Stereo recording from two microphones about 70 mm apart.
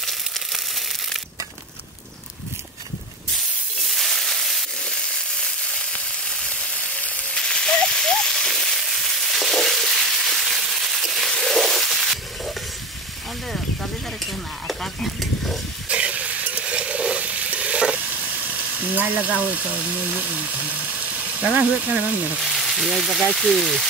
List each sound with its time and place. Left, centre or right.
0.0 s crushing: centre
3.9 s a sound: centre
5.4 s frying: centre
7.3 s a sound: centre
14.2 s stir: centre
15.9 s stir: centre
18.5 s frying: right
19.4 s speech: centre
22.4 s speech: centre